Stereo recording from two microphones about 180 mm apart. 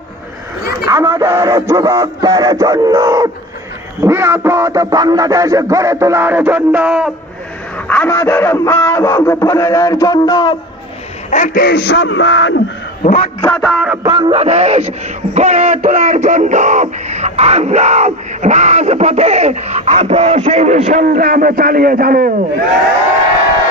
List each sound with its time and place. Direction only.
0.7 s speech: 20° right (ahead or behind)
4.0 s a sound: 15° right (ahead or behind)
7.9 s a man's voice: 15° left (ahead or behind)
11.3 s a man's voice: 45° left (ahead or behind); by 12.6 s 90° left
13.1 s a man's voice: 35° left (ahead or behind)
13.4 s music: 5° left (ahead or behind)
13.7 s a sound: 5° right (ahead or behind)
14.3 s speech: 35° right (ahead or behind); by 22.3 s 55° right (ahead or behind)